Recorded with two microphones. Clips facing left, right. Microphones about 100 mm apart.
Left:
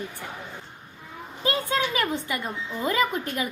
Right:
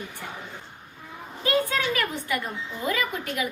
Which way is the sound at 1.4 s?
25° left (ahead or behind).